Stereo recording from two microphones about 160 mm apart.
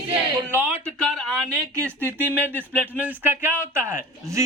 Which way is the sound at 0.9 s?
5° left (ahead or behind).